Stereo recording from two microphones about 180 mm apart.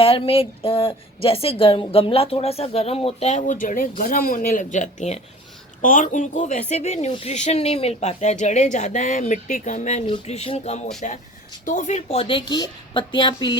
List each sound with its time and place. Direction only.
0.0 s a woman's voice: 30° left (ahead or behind)